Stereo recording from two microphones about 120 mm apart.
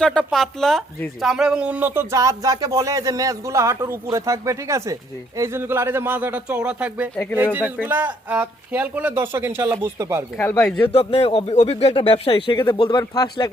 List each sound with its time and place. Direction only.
0.0 s speech: 5° left (ahead or behind); by 10.2 s 20° right (ahead or behind)
10.3 s speech: 20° left (ahead or behind)
10.8 s speech: 50° left (ahead or behind)
11.4 s speech: 65° left (ahead or behind); by 13.5 s 40° left (ahead or behind)